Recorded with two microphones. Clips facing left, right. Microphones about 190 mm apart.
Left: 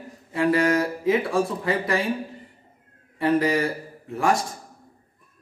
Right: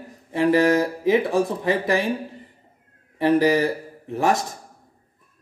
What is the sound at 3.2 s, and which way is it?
Speech, 25° right (ahead or behind).